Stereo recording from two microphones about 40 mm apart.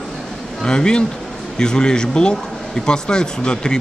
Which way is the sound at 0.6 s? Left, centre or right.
Centre.